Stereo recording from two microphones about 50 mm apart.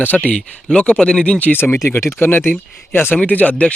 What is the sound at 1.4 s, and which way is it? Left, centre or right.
Speech, left.